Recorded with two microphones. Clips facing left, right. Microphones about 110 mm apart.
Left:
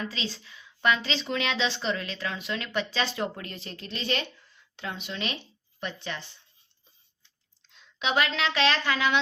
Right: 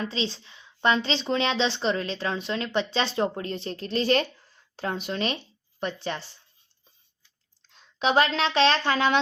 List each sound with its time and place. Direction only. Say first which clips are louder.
0.0 s a woman's voice: right 4 dB; 30° right (ahead or behind)
7.7 s speech: right 5 dB; 35° right (ahead or behind)